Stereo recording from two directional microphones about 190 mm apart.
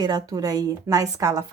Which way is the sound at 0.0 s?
20° right (ahead or behind).